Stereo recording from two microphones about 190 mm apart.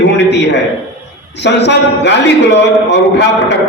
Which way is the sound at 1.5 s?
65° left (ahead or behind).